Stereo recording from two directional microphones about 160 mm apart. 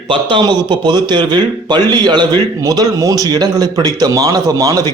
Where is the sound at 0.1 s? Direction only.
30° right (ahead or behind).